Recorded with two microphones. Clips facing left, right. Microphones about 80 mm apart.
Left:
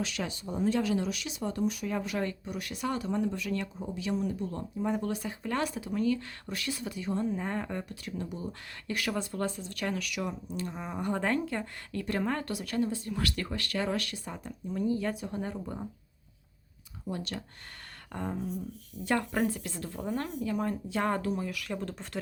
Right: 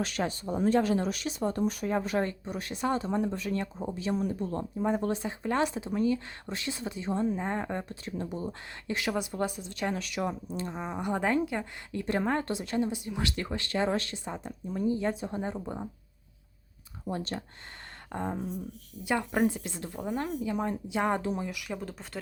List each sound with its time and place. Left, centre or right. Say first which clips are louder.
0.0 s speech: right 4 dB; right
11.0 s a woman's voice: right 2 dB; centre
17.1 s a woman's voice: right 2 dB; right
19.0 s a woman's voice: right 2 dB; centre
21.7 s speech: left 1 dB; centre